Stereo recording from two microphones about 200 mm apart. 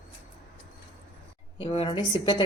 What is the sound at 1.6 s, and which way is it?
Speech, 25° left (ahead or behind).